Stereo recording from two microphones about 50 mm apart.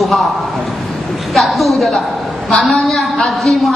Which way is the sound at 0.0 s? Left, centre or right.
Centre.